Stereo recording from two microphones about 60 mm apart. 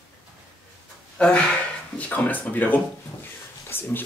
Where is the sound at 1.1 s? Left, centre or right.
Centre.